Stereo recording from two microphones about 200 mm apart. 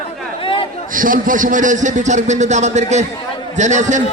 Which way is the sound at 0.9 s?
45° right (ahead or behind).